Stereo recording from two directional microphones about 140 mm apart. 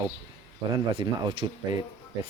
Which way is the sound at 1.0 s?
30° right (ahead or behind).